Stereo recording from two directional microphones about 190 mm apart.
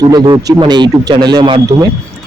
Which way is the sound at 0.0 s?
20° right (ahead or behind).